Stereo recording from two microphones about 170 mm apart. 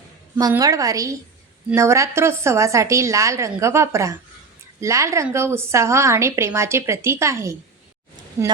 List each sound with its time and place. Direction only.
0.5 s a woman's voice: 20° right (ahead or behind)